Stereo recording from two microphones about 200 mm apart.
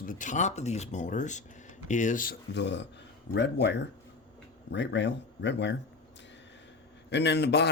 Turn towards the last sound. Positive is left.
turn(degrees=55)  # may be behind; listen again after turning